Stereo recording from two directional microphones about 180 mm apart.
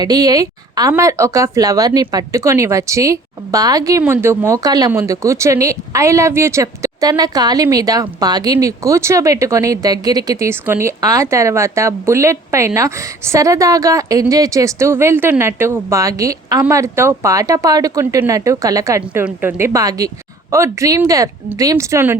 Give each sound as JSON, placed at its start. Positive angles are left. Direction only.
{"t": 0.0, "sound": "speech", "side_deg": -20}